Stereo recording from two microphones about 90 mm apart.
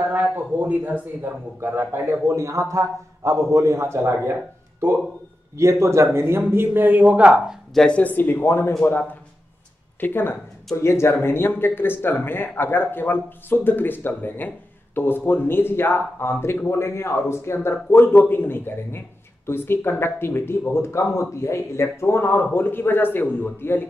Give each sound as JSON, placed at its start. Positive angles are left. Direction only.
{"t": 0.1, "sound": "a sound", "side_deg": -20}
{"t": 1.6, "sound": "a man's voice", "side_deg": -25}
{"t": 7.7, "sound": "a man's voice", "side_deg": 10}
{"t": 9.9, "sound": "a man's voice", "side_deg": 25}